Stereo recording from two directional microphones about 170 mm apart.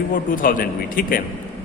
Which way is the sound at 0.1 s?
55° left (ahead or behind).